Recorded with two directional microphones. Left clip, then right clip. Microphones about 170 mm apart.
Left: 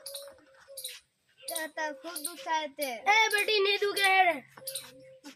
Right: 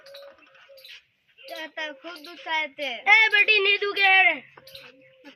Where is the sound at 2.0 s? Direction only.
5° right (ahead or behind).